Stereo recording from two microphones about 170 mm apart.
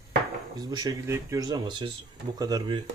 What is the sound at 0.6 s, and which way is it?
Speech, 25° right (ahead or behind).